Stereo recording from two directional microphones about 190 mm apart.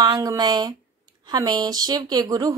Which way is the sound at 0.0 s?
20° right (ahead or behind).